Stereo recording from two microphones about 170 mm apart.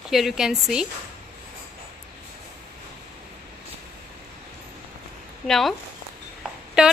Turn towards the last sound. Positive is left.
turn(degrees=-5)  # may be behind; listen again after turning